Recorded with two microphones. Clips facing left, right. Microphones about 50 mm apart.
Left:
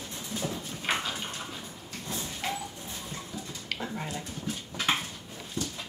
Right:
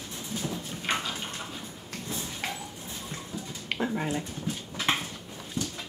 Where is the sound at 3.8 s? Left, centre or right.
Centre.